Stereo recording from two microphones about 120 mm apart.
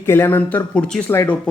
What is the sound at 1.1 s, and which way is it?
Speech, 20° left (ahead or behind).